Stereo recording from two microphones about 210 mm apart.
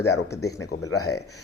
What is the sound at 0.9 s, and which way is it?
Speech, 90° left.